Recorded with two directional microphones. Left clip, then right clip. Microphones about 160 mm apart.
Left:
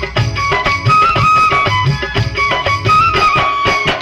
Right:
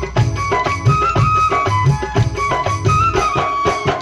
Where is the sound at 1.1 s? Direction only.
60° right (ahead or behind).